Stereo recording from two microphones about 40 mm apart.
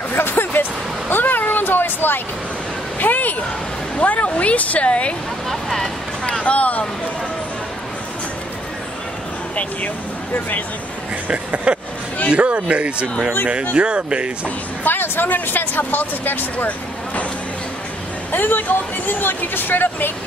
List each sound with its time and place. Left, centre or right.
0.1 s a sound: left
3.0 s a sound: left
4.0 s speech: left
6.4 s speech: left
11.2 s speech: right
14.9 s speech: left
16.5 s speech: left
18.3 s speech: left